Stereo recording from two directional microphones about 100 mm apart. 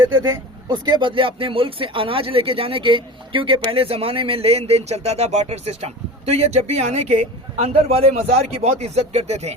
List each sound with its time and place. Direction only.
0.7 s speech: 45° right (ahead or behind)
3.7 s speech: 70° right (ahead or behind); by 9.6 s 90° right